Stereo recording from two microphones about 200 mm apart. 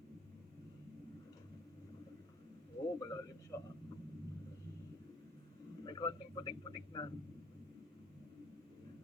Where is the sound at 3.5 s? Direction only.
15° left (ahead or behind).